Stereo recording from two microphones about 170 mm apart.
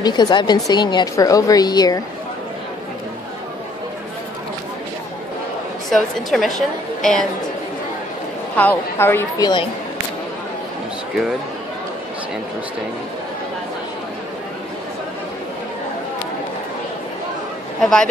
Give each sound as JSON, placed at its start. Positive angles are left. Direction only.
{"t": 0.0, "sound": "a woman's voice", "side_deg": 25}
{"t": 5.9, "sound": "a woman's voice", "side_deg": 0}
{"t": 8.5, "sound": "a woman's voice", "side_deg": 10}
{"t": 17.7, "sound": "a woman's voice", "side_deg": 5}